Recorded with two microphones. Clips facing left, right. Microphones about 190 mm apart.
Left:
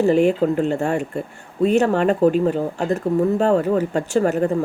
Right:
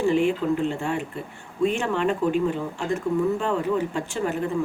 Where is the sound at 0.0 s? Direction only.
40° left (ahead or behind).